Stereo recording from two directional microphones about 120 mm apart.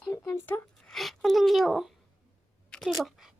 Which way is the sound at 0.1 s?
20° left (ahead or behind).